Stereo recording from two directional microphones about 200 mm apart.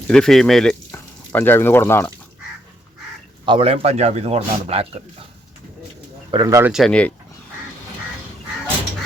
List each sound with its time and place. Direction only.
0.1 s speech: centre (ahead or behind)
3.4 s a man's voice: 25° right (ahead or behind)
6.3 s speech: 15° right (ahead or behind)
6.7 s speech: 5° left (ahead or behind)